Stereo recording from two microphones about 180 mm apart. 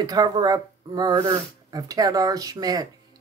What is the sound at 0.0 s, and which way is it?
Speech, 20° right (ahead or behind).